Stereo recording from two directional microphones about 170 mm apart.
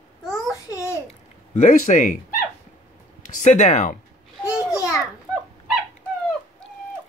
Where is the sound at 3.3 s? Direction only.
45° left (ahead or behind).